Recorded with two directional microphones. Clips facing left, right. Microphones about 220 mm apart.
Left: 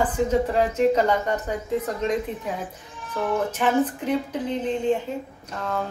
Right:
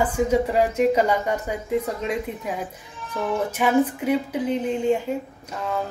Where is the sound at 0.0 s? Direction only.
10° right (ahead or behind).